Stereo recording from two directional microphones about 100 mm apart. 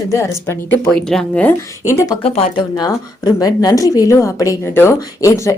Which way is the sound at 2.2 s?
75° left (ahead or behind).